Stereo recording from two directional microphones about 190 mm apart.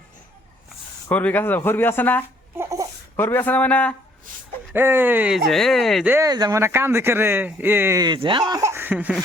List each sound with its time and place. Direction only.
1.0 s speech: 10° left (ahead or behind)
2.6 s babbling: 15° right (ahead or behind)
3.2 s speech: 10° left (ahead or behind)
4.7 s speech: 10° right (ahead or behind)
6.1 s speech: 15° right (ahead or behind)